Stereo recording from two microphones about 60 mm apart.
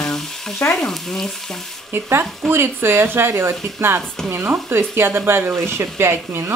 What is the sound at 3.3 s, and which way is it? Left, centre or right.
Speech, right.